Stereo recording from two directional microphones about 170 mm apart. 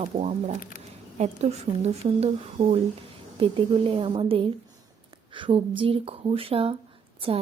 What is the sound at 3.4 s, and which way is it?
A woman's voice, 30° right (ahead or behind).